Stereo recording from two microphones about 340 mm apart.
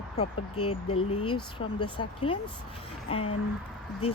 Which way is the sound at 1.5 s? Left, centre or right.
Centre.